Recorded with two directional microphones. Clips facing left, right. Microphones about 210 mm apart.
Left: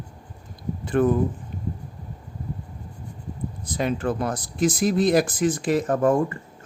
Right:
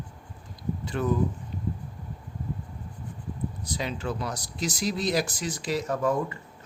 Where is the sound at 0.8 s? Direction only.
55° left (ahead or behind).